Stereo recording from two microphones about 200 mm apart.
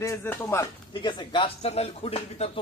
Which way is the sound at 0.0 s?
15° left (ahead or behind).